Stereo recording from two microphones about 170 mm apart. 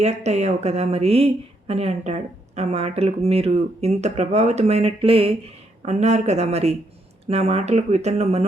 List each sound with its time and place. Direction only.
0.0 s speech: 40° right (ahead or behind)